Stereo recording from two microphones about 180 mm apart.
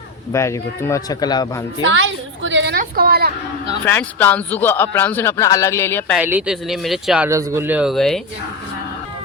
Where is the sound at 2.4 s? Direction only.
80° right.